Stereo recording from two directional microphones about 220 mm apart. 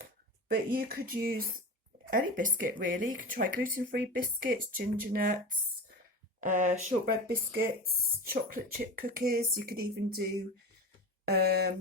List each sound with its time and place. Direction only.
0.0 s speech: 40° right (ahead or behind)